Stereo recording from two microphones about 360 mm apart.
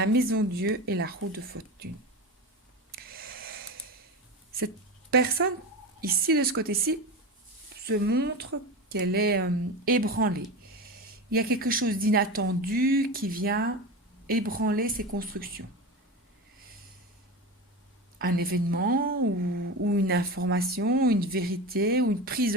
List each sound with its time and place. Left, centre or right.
0.0 s speech: right
2.9 s a sound: right
5.1 s speech: right
18.2 s speech: right